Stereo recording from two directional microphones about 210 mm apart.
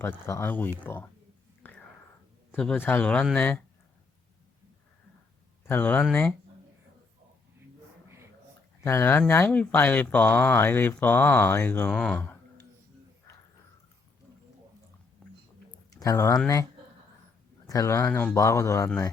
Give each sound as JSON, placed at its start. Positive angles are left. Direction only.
{"t": 0.0, "sound": "speech", "side_deg": 10}
{"t": 1.6, "sound": "whispering", "side_deg": 10}
{"t": 2.5, "sound": "speech", "side_deg": 5}
{"t": 5.6, "sound": "speech", "side_deg": 10}
{"t": 8.8, "sound": "speech", "side_deg": 15}
{"t": 15.2, "sound": "chewing", "side_deg": 5}
{"t": 15.9, "sound": "speech", "side_deg": 15}
{"t": 17.7, "sound": "speech", "side_deg": 15}